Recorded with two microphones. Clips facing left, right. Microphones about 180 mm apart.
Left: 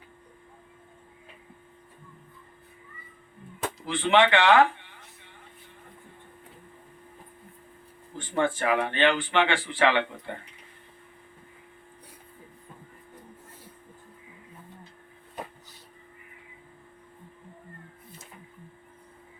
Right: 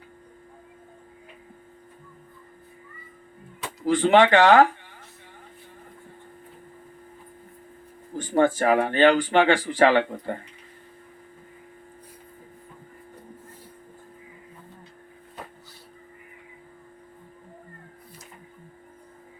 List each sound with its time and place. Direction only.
3.8 s speech: 40° right (ahead or behind)
8.1 s speech: 40° right (ahead or behind)